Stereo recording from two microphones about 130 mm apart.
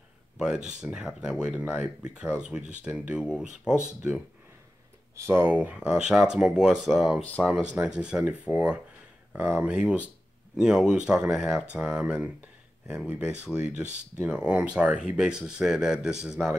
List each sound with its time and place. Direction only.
0.7 s speech: 5° right (ahead or behind)
5.1 s speech: 20° right (ahead or behind); by 16.5 s 5° right (ahead or behind)